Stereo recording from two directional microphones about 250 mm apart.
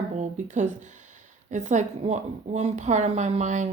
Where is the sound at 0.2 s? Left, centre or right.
Right.